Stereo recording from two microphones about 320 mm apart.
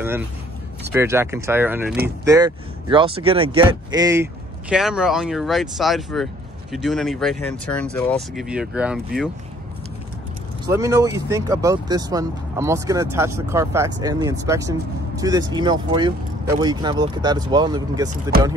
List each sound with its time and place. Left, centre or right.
0.9 s speech: centre
10.7 s speech: centre